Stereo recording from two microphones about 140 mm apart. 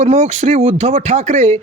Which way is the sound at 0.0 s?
55° right (ahead or behind).